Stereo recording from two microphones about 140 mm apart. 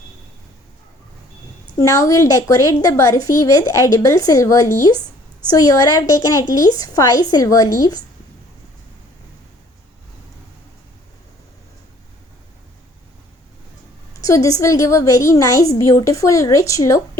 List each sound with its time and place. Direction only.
1.8 s a woman's voice: 20° left (ahead or behind)
14.2 s a woman's voice: 25° left (ahead or behind)